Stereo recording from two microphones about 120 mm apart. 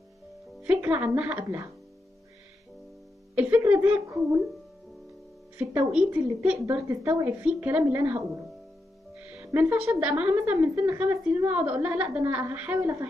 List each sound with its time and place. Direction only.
0.6 s a woman's voice: 10° right (ahead or behind)
3.3 s a woman's voice: 15° right (ahead or behind)
5.6 s a woman's voice: 15° right (ahead or behind)
9.3 s a woman's voice: 15° right (ahead or behind)
10.7 s a woman's voice: 25° right (ahead or behind)
11.0 s a woman's voice: 10° right (ahead or behind)
12.7 s a woman's voice: 25° right (ahead or behind)